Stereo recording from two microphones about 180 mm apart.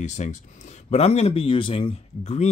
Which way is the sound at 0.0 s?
40° left (ahead or behind).